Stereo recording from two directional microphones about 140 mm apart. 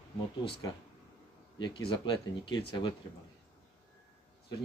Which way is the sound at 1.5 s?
35° left (ahead or behind).